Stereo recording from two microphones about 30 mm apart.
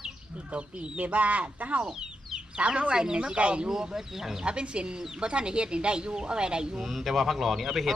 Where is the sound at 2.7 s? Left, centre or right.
Right.